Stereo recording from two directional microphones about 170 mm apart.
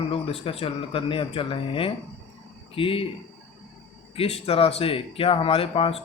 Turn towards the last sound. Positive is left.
turn(degrees=35)  # may be behind; listen again after turning